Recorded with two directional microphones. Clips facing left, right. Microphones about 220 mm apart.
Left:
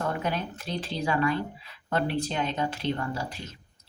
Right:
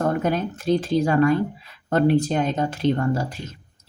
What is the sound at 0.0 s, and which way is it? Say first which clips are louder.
A woman's voice: right 8 dB; 45° right (ahead or behind).